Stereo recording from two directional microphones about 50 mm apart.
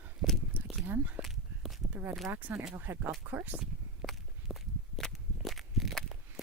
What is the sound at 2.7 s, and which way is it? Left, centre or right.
Speech, right.